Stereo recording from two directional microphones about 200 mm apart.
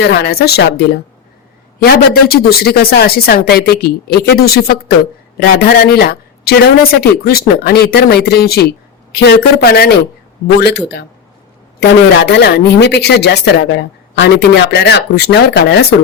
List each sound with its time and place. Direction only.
0.0 s a woman's voice: 55° left (ahead or behind)